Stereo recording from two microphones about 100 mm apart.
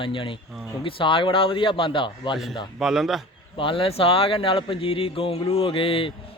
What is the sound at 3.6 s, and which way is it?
Speech, 60° left (ahead or behind).